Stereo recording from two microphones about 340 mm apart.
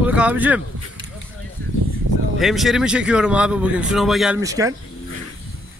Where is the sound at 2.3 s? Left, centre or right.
Centre.